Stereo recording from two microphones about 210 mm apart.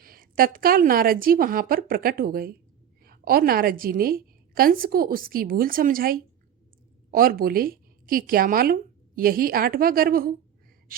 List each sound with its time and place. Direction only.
0.0 s a woman's voice: 45° right (ahead or behind)